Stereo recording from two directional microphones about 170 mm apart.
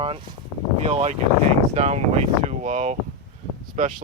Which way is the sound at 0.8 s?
40° right (ahead or behind).